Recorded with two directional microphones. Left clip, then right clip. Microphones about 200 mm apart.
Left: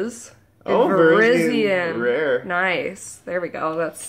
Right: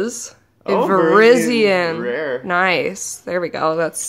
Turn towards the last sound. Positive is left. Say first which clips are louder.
# right 5 dB
turn(degrees=-40)  # may be behind; listen again after turning